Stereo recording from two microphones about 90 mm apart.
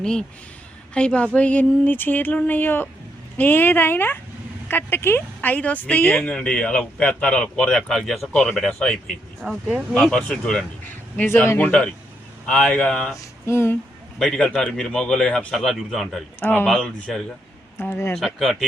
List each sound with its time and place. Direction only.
0.0 s speech: 10° left (ahead or behind)
9.4 s speech: 5° right (ahead or behind)
10.8 s a man's voice: 20° left (ahead or behind)
11.7 s speech: 15° left (ahead or behind)
13.5 s speech: 30° left (ahead or behind)
14.2 s speech: 5° left (ahead or behind)
15.5 s speech: centre (ahead or behind)
16.4 s speech: 20° left (ahead or behind)
16.6 s speech: 5° left (ahead or behind)
17.7 s speech: 25° left (ahead or behind)
18.2 s speech: centre (ahead or behind)